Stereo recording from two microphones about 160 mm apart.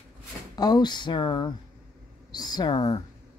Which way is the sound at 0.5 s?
25° left (ahead or behind).